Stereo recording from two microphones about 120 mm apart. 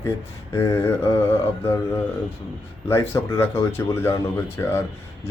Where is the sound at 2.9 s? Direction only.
20° left (ahead or behind).